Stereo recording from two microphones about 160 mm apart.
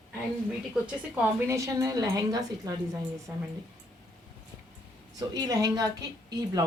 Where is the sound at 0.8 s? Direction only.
10° right (ahead or behind).